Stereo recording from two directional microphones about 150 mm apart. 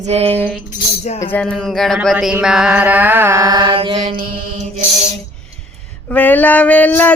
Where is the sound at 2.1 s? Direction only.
5° right (ahead or behind); by 4.2 s 30° right (ahead or behind).